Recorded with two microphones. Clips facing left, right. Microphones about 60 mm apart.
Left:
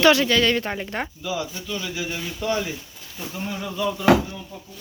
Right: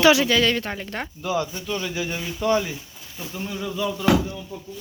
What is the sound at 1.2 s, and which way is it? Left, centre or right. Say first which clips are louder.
Speech: right 7 dB; right.